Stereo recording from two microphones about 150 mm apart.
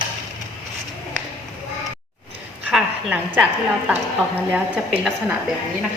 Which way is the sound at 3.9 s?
10° right (ahead or behind).